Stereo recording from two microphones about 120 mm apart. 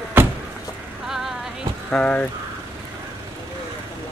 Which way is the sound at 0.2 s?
15° right (ahead or behind).